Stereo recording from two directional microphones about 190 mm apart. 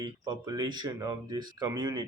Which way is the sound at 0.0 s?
20° right (ahead or behind).